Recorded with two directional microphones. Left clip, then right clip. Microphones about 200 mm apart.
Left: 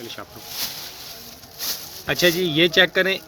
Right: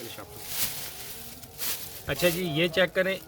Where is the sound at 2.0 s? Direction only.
35° left (ahead or behind).